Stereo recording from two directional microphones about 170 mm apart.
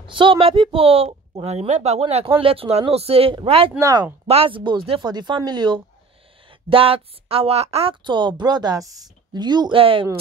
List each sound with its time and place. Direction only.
0.0 s a woman's voice: 30° right (ahead or behind)